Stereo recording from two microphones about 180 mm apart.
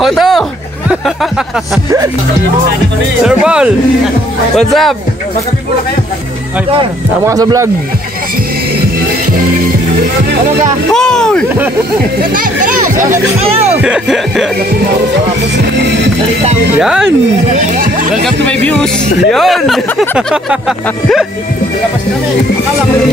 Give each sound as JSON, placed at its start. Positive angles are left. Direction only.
{"t": 0.2, "sound": "music", "side_deg": 0}
{"t": 3.3, "sound": "speech", "side_deg": -5}
{"t": 7.2, "sound": "speech", "side_deg": -20}
{"t": 10.9, "sound": "speech", "side_deg": 5}
{"t": 11.4, "sound": "speech", "side_deg": -10}
{"t": 12.2, "sound": "a child's voice", "side_deg": -50}
{"t": 13.7, "sound": "speech", "side_deg": -5}
{"t": 15.8, "sound": "music", "side_deg": -80}
{"t": 16.7, "sound": "speech", "side_deg": -5}
{"t": 17.5, "sound": "speech", "side_deg": -45}
{"t": 18.2, "sound": "speech", "side_deg": 5}